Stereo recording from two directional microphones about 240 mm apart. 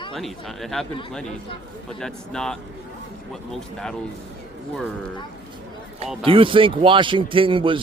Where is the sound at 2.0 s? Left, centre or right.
Centre.